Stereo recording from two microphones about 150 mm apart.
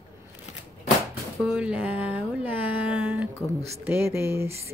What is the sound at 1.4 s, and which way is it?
Speech, 5° right (ahead or behind).